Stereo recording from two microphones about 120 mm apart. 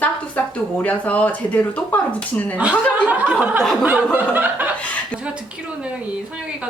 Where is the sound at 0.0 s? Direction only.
10° left (ahead or behind).